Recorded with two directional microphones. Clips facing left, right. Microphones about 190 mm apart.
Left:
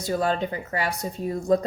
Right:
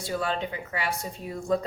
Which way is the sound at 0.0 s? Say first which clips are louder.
Left 5 dB; 40° left (ahead or behind).